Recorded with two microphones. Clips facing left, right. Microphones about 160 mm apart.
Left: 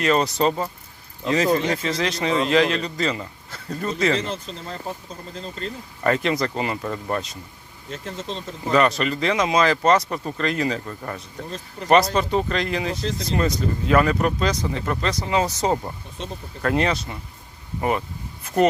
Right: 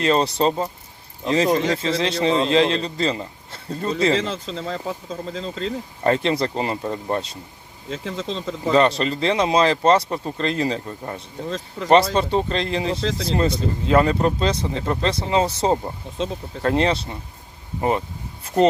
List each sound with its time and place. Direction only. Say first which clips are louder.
0.0 s speech: right 1 dB; 30° right (ahead or behind)
4.2 s speech: right 3 dB; 90° right
6.0 s speech: right 1 dB; 30° right (ahead or behind)
8.3 s speech: right 3 dB; 90° right
8.7 s speech: right 1 dB; 30° right (ahead or behind)
11.4 s speech: right 8 dB; 90° right
11.9 s speech: right 1 dB; 30° right (ahead or behind)
16.1 s speech: right 5 dB; 90° right
16.6 s speech: right 2 dB; 30° right (ahead or behind)